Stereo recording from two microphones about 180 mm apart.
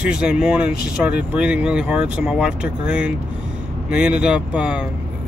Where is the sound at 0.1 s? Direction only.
5° right (ahead or behind).